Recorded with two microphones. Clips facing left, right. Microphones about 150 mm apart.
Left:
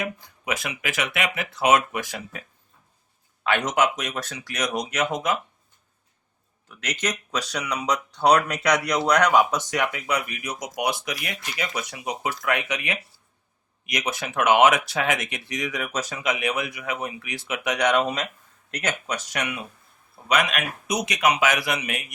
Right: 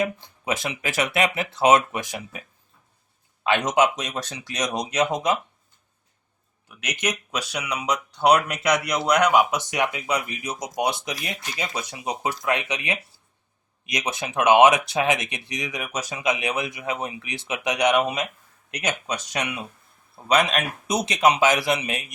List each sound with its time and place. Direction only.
0.0 s speech: 30° right (ahead or behind)
3.4 s speech: 20° right (ahead or behind)
6.7 s speech: 15° right (ahead or behind)